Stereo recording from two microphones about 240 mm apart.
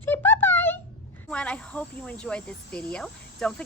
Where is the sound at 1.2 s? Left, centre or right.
Centre.